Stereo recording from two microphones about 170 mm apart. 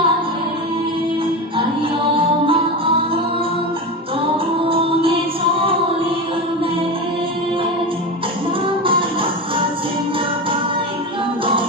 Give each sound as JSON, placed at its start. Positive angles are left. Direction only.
{"t": 2.1, "sound": "music", "side_deg": -30}
{"t": 4.6, "sound": "music", "side_deg": -35}
{"t": 8.6, "sound": "music", "side_deg": -30}